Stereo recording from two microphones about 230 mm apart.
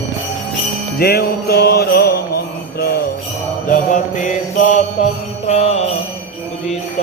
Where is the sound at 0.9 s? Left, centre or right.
Left.